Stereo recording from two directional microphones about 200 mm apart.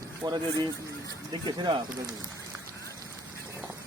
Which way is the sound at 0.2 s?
20° right (ahead or behind).